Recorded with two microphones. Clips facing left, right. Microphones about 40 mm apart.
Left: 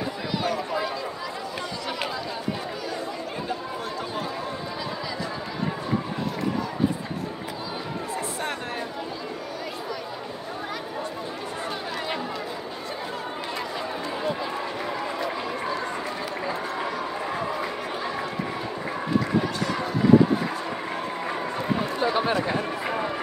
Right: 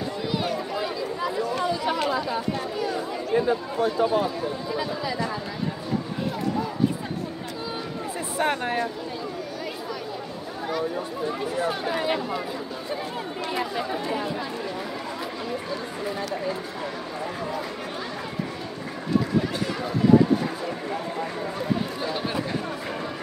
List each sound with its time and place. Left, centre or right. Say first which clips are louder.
1.2 s chatter: right 7 dB; centre
3.3 s speech: right 12 dB; centre
8.4 s speech: right 6 dB; centre
11.6 s speech: right 5 dB; centre
13.6 s speech: right 5 dB; centre
17.4 s a sound: left 1 dB; left
19.7 s run: even; centre